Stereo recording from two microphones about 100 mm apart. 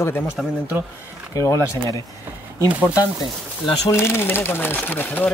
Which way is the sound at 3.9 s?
25° left (ahead or behind).